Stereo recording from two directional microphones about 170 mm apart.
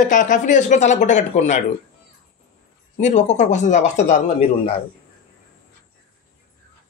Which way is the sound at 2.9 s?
45° left (ahead or behind).